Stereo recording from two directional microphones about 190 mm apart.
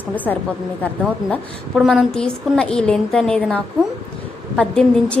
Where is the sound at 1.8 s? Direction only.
Centre (ahead or behind).